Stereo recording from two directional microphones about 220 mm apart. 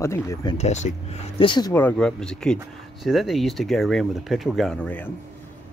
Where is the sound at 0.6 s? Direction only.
30° left (ahead or behind).